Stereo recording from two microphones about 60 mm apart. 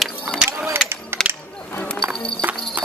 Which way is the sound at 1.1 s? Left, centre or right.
Right.